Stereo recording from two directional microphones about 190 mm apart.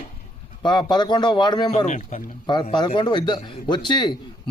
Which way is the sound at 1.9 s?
40° left (ahead or behind).